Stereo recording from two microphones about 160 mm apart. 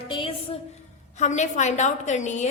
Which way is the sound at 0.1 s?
35° left (ahead or behind).